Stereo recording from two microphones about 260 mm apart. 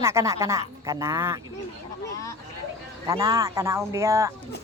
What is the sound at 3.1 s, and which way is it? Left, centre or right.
Speech, centre.